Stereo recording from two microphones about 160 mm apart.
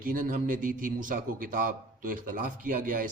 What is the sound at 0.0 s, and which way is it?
A man's voice, 60° right (ahead or behind).